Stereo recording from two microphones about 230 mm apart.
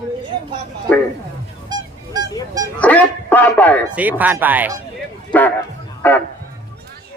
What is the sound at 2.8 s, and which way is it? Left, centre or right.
Speech, centre.